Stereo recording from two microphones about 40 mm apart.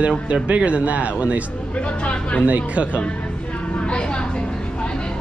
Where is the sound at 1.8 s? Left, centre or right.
Left.